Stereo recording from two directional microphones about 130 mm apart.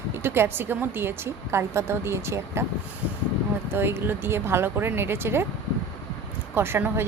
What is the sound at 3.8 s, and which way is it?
Speech, 15° right (ahead or behind).